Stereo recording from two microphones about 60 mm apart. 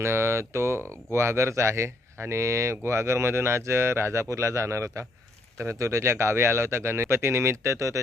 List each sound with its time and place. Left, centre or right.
0.0 s speech: right